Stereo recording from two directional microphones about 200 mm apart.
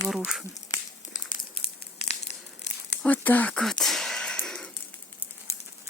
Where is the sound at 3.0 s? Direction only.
10° left (ahead or behind).